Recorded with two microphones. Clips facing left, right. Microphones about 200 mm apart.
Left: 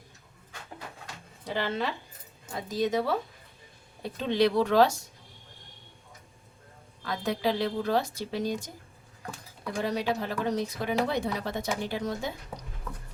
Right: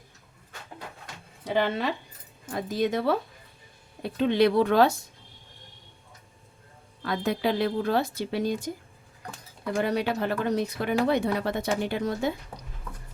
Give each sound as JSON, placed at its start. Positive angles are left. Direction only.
{"t": 1.5, "sound": "speech", "side_deg": -60}
{"t": 4.2, "sound": "speech", "side_deg": -60}
{"t": 7.0, "sound": "speech", "side_deg": -55}
{"t": 9.7, "sound": "speech", "side_deg": -60}